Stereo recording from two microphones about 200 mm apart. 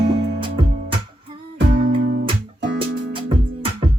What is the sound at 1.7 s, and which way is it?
Music, 55° right (ahead or behind).